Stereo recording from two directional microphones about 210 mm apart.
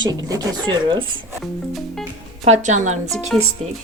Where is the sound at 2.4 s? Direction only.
35° right (ahead or behind).